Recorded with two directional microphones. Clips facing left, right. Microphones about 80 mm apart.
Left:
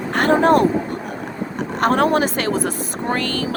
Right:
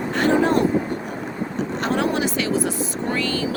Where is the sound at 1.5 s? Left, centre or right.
Left.